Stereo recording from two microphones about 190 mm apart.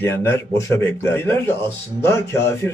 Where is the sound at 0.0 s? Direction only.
15° left (ahead or behind).